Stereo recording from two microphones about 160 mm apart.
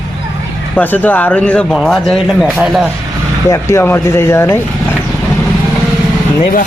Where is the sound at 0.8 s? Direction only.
10° left (ahead or behind).